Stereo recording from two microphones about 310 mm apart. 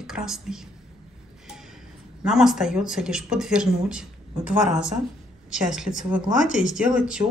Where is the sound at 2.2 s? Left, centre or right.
Centre.